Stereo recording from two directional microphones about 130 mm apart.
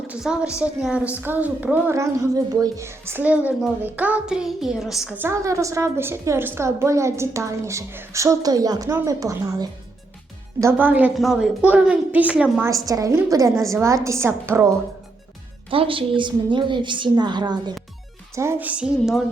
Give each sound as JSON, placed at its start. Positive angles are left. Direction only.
{"t": 0.1, "sound": "music", "side_deg": -5}
{"t": 0.6, "sound": "a woman's voice", "side_deg": -5}
{"t": 5.1, "sound": "a woman's voice", "side_deg": -20}
{"t": 10.6, "sound": "a woman's voice", "side_deg": -15}
{"t": 12.6, "sound": "a woman's voice", "side_deg": -25}
{"t": 15.7, "sound": "a woman's voice", "side_deg": -45}
{"t": 18.3, "sound": "a woman's voice", "side_deg": -20}
{"t": 18.7, "sound": "music", "side_deg": -5}